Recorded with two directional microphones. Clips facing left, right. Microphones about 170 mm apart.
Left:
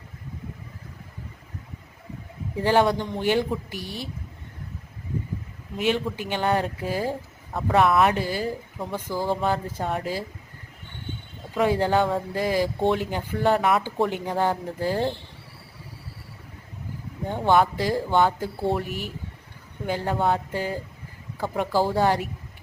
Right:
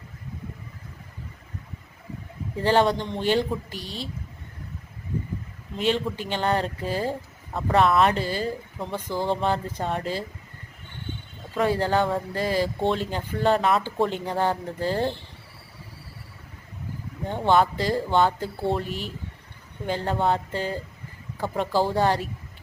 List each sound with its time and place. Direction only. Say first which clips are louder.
2.6 s speech: even; 10° left (ahead or behind)
5.7 s speech: even; 10° left (ahead or behind)
11.6 s speech: left 1 dB; 15° left (ahead or behind)
17.2 s speech: even; 15° left (ahead or behind)